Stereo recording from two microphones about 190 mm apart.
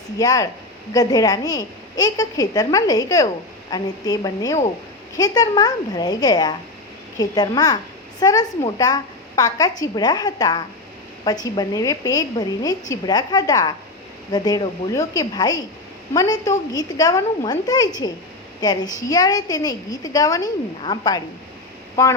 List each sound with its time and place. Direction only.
0.2 s a woman's voice: 20° left (ahead or behind)